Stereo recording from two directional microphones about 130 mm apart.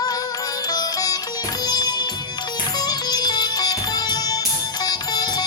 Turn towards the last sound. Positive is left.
turn(degrees=35)  # may be behind; listen again after turning